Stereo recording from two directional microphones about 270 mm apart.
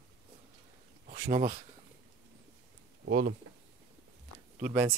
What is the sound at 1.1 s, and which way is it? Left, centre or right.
Speech, right.